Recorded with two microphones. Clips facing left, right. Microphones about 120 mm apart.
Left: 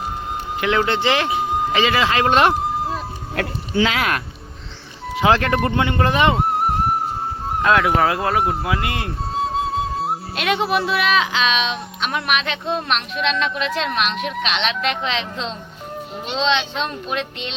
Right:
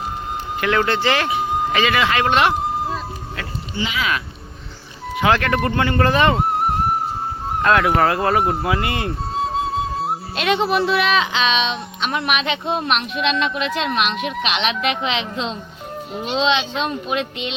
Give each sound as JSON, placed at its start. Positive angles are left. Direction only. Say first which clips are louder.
{"t": 0.6, "sound": "speech", "louder": "even", "side_deg": 20}
{"t": 2.5, "sound": "a sound", "louder": "even", "side_deg": 0}
{"t": 3.3, "sound": "speech", "louder": "left 9 dB", "side_deg": 80}
{"t": 5.1, "sound": "speech", "louder": "left 1 dB", "side_deg": 25}
{"t": 6.3, "sound": "music", "louder": "even", "side_deg": 0}
{"t": 7.6, "sound": "speech", "louder": "right 1 dB", "side_deg": 0}